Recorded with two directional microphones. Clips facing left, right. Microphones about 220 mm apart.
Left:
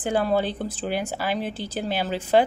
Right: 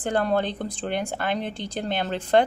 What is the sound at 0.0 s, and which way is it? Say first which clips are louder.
Speech: left 1 dB; 5° left (ahead or behind).